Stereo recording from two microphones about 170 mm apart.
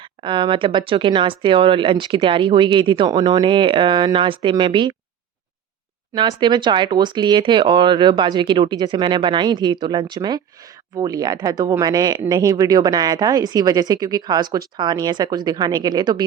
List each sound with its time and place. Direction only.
0.2 s speech: 30° right (ahead or behind)
6.1 s speech: 25° right (ahead or behind)